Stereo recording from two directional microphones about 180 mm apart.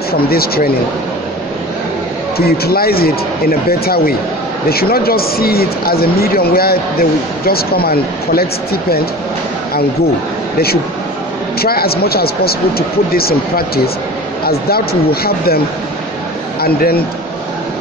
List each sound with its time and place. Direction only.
0.1 s speech: 55° left (ahead or behind)
2.3 s speech: 60° left (ahead or behind)
11.6 s speech: 60° left (ahead or behind)
16.6 s speech: 60° left (ahead or behind)